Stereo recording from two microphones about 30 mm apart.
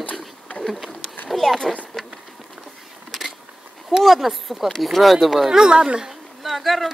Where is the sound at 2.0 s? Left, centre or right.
Centre.